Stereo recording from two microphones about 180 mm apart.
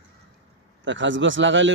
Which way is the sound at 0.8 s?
90° right.